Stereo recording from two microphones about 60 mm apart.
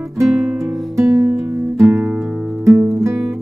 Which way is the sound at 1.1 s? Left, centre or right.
Right.